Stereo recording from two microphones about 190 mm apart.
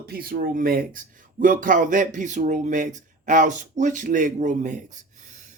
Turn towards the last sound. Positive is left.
turn(degrees=-40)  # may be behind; listen again after turning